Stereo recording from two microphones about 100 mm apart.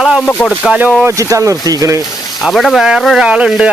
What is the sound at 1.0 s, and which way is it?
Speech, 35° right (ahead or behind).